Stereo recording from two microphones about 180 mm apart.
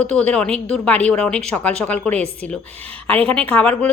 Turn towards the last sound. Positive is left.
turn(degrees=5)  # may be behind; listen again after turning